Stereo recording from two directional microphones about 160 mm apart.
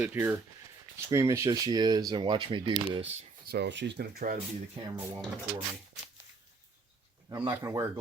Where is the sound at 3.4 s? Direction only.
85° right.